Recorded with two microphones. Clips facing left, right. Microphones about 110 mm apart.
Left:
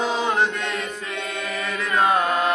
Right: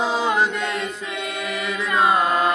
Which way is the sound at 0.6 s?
10° right (ahead or behind).